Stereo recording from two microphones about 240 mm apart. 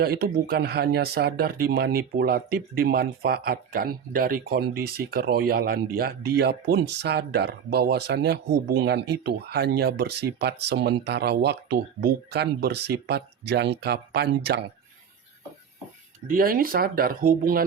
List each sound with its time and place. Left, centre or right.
0.0 s speech: right
16.3 s speech: right